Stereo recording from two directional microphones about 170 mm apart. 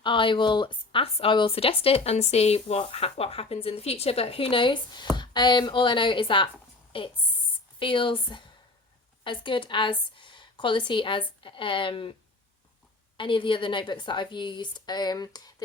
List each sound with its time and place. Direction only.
0.0 s a woman's voice: 30° left (ahead or behind)
13.1 s a woman's voice: 30° left (ahead or behind)